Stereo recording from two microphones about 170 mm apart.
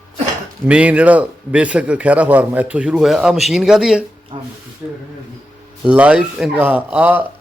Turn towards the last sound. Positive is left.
turn(degrees=-10)  # may be behind; listen again after turning